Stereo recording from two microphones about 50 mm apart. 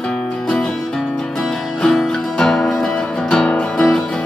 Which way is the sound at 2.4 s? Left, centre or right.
Centre.